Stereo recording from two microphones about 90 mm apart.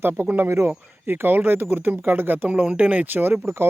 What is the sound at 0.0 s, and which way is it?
Speech, 20° right (ahead or behind).